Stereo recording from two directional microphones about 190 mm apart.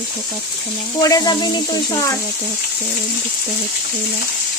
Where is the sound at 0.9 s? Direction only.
20° left (ahead or behind).